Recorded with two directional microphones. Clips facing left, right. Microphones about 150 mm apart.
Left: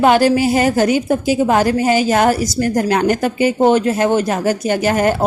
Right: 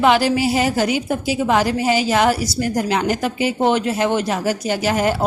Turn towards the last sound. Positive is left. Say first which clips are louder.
# left 4 dB
turn(degrees=50)  # may be behind; listen again after turning